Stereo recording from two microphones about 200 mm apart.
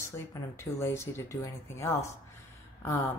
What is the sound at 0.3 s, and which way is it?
A woman's voice, 15° left (ahead or behind).